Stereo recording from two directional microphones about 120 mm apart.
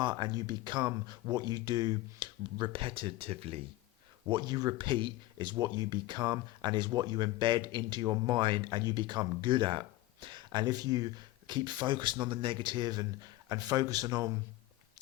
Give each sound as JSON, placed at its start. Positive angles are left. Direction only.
{"t": 0.0, "sound": "speech", "side_deg": -40}
{"t": 4.3, "sound": "speech", "side_deg": -35}